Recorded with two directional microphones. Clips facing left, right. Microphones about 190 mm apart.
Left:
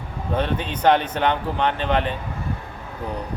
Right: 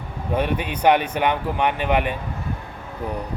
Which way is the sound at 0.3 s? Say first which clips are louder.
Right 1 dB; 10° right (ahead or behind).